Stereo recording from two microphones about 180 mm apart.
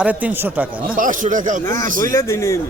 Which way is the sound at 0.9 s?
45° right (ahead or behind).